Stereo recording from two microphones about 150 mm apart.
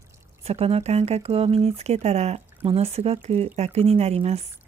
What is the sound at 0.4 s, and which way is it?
Speech, 45° right (ahead or behind).